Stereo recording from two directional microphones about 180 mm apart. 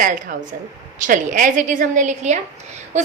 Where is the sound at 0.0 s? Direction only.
50° right (ahead or behind).